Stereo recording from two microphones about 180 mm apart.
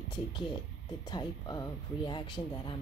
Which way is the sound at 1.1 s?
20° left (ahead or behind).